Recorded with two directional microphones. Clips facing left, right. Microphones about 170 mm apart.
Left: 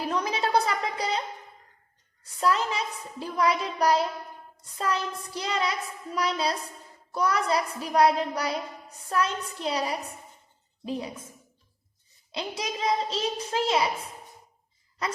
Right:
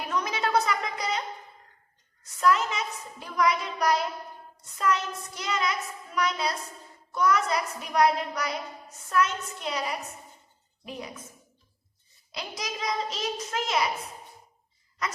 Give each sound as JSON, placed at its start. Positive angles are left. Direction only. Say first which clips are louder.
{"t": 0.1, "sound": "a sound", "louder": "left 1 dB", "side_deg": 30}
{"t": 2.4, "sound": "a woman's voice", "louder": "right 1 dB", "side_deg": 30}
{"t": 12.3, "sound": "a child's voice", "louder": "left 4 dB", "side_deg": 25}
{"t": 15.0, "sound": "a woman's voice", "louder": "left 2 dB", "side_deg": 30}